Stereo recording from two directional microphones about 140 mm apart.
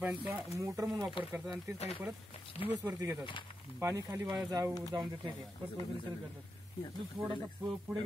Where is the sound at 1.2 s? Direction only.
35° left (ahead or behind).